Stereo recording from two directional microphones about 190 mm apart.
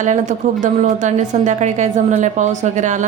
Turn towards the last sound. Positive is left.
turn(degrees=-40)  # may be behind; listen again after turning